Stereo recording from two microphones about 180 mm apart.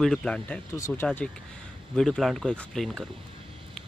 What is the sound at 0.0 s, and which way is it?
Speech, 5° left (ahead or behind).